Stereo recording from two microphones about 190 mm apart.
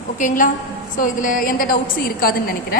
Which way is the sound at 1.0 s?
45° left (ahead or behind).